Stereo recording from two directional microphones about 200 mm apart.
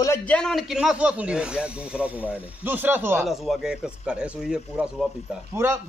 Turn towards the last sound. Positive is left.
turn(degrees=-15)  # may be behind; listen again after turning